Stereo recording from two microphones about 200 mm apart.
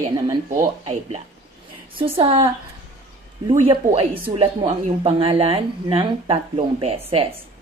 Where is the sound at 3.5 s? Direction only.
25° right (ahead or behind).